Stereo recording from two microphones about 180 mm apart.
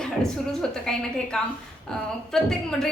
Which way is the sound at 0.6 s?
5° left (ahead or behind).